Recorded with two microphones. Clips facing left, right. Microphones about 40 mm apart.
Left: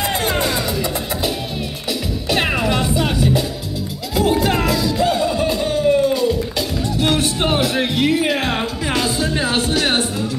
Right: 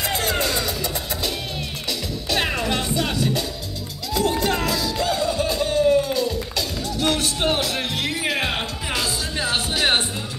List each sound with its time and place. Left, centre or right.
0.0 s music: centre
1.9 s music: centre
8.9 s music: left
9.6 s music: centre